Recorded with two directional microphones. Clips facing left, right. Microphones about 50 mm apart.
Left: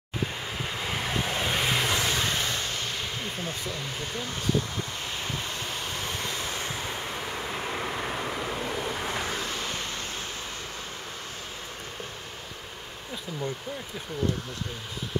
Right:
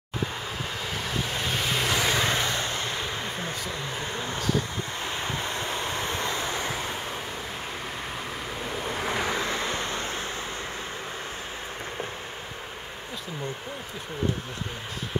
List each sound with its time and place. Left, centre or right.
1.2 s vehicle: centre
2.0 s vehicle: centre
2.2 s a sound: right
5.0 s vehicle: right
7.5 s vehicle: centre
8.9 s vehicle: centre
9.2 s vehicle: right